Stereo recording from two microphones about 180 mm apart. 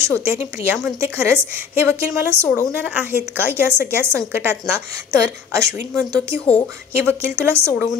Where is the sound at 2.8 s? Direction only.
10° right (ahead or behind).